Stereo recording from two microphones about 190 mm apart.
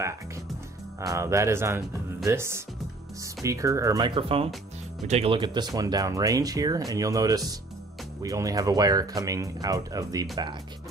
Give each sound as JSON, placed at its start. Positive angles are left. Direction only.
{"t": 1.0, "sound": "speech", "side_deg": -15}